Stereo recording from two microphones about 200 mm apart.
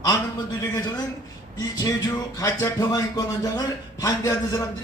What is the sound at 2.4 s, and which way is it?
Speech, 15° left (ahead or behind).